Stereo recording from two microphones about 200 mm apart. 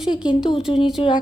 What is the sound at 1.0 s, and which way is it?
Speech, 30° left (ahead or behind).